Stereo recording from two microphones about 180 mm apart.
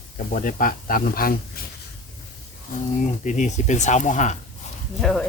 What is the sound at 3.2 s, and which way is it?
Speech, 45° left (ahead or behind).